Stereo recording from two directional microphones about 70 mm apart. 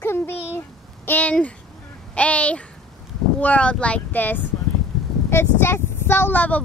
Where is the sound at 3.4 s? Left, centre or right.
Left.